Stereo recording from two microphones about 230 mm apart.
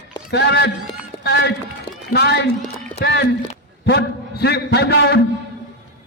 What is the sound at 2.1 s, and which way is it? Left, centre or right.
A man's voice, left.